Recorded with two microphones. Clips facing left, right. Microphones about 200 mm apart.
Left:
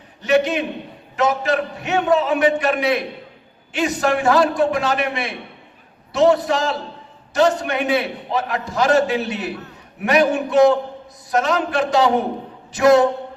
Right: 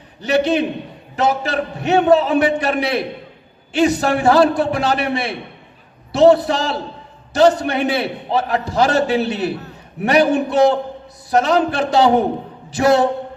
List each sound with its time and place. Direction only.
0.2 s a man's voice: 30° right (ahead or behind)